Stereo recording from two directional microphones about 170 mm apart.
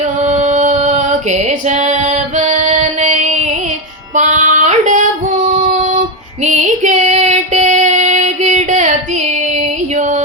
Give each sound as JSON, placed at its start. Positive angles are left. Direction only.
{"t": 0.0, "sound": "female singing", "side_deg": -45}
{"t": 6.4, "sound": "child singing", "side_deg": -45}